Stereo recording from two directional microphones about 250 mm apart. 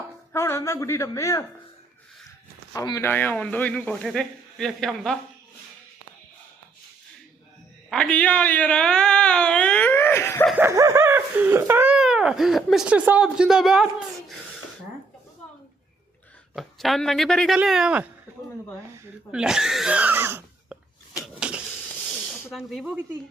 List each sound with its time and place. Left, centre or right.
0.3 s speech: centre
2.7 s speech: centre
7.9 s speech: centre
10.6 s speech: centre
16.6 s speech: centre
21.3 s a sound: centre
22.5 s speech: centre